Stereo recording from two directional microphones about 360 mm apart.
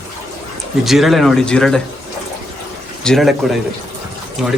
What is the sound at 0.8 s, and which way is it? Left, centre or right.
A man's voice, centre.